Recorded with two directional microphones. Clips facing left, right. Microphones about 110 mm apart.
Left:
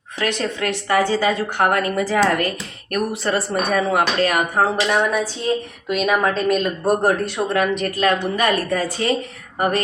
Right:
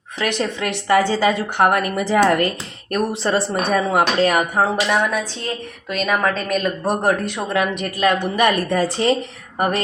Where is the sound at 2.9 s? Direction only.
30° right (ahead or behind).